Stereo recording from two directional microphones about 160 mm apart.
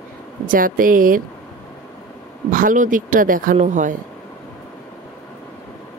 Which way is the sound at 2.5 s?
55° right (ahead or behind).